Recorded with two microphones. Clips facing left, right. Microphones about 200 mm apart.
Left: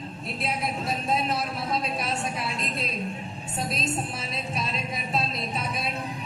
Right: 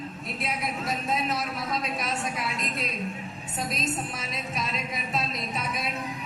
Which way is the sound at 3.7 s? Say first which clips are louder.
Even; 30° left (ahead or behind).